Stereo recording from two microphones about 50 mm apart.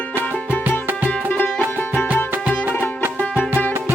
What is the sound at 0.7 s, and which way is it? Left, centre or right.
Music, right.